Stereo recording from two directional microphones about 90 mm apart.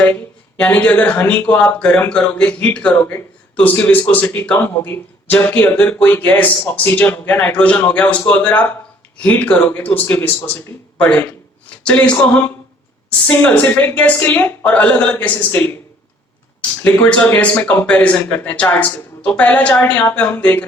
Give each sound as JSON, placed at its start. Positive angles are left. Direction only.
{"t": 0.6, "sound": "speech", "side_deg": 15}